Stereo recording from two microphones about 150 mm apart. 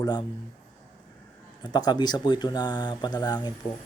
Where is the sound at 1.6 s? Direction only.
30° left (ahead or behind).